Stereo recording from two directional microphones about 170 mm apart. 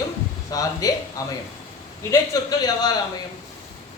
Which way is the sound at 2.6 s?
25° left (ahead or behind).